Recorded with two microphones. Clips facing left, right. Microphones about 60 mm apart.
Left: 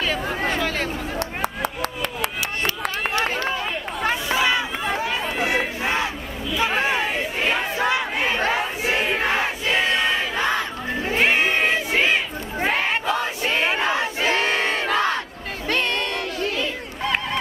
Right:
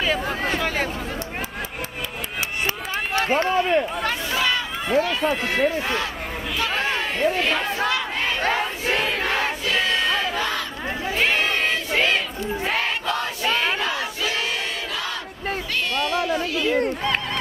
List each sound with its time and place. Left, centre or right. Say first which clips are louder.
0.0 s speech: even; centre
4.0 s a sound: left 2 dB; centre
4.9 s run: right 8 dB; centre
6.6 s crowd: left 3 dB; centre
8.5 s crowd: even; centre
12.6 s battle cry: left 4 dB; centre; by 15.1 s left
15.7 s music: left 2 dB; left